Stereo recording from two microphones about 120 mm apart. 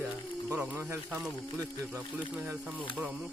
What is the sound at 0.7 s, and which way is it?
Speech, 15° right (ahead or behind).